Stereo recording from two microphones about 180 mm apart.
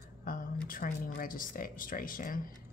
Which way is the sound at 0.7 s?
50° left (ahead or behind).